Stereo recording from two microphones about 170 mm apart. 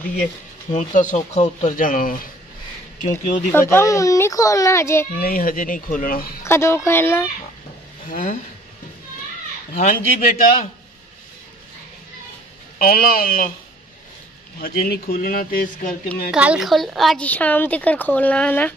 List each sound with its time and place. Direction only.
0.7 s speech: 45° left (ahead or behind)
3.5 s speech: 15° left (ahead or behind)
5.1 s speech: 55° left (ahead or behind)
6.4 s speech: 15° left (ahead or behind)
8.1 s speech: 50° left (ahead or behind)
9.8 s speech: 50° left (ahead or behind)
12.7 s speech: 60° left (ahead or behind)
14.6 s speech: 65° left (ahead or behind)
16.3 s speech: 5° right (ahead or behind)